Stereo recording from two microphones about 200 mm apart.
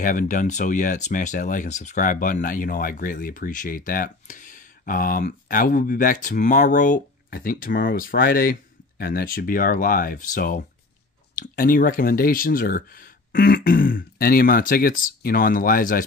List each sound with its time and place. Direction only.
0.0 s speech: 40° left (ahead or behind)